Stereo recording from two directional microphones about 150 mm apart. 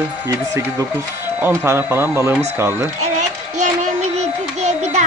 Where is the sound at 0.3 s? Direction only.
20° right (ahead or behind).